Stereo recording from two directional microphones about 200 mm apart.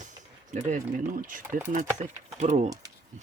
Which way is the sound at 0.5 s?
40° right (ahead or behind).